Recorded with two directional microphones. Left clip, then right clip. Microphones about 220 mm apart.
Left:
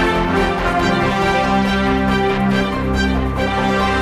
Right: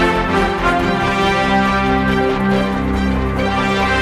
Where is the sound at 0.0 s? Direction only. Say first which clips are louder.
Right 1 dB; centre (ahead or behind).